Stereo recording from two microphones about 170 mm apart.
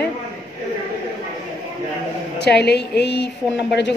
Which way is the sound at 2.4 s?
75° left (ahead or behind).